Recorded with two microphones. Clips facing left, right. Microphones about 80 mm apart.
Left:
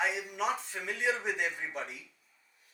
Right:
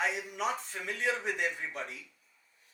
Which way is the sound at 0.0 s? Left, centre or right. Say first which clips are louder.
Left 1 dB; centre.